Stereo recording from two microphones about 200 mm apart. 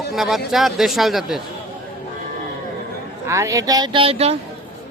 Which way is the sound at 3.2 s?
15° right (ahead or behind).